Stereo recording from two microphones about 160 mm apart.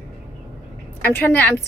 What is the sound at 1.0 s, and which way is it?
Speech, 10° left (ahead or behind).